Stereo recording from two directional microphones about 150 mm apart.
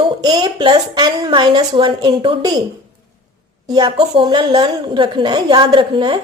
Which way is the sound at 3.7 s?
25° right (ahead or behind).